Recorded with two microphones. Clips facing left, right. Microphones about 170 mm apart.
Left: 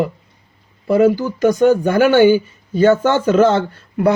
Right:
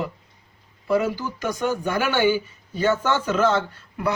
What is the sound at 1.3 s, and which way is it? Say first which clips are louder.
Speech: left 13 dB; 45° left (ahead or behind).